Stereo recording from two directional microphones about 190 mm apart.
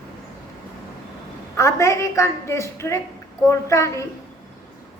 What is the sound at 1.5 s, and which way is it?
A woman's voice, 15° left (ahead or behind).